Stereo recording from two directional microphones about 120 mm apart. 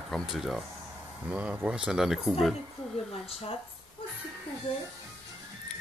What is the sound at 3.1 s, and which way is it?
Speech, 55° left (ahead or behind).